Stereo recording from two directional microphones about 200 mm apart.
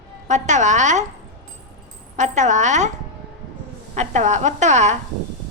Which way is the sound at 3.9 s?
35° right (ahead or behind).